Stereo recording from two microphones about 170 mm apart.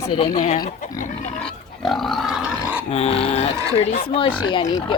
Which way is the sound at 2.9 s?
40° left (ahead or behind).